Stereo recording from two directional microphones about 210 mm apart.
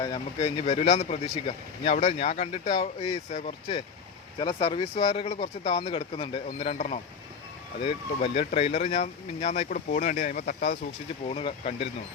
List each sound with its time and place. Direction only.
0.0 s speech: 20° left (ahead or behind); by 10.8 s 40° left (ahead or behind)
11.3 s speech: 30° left (ahead or behind)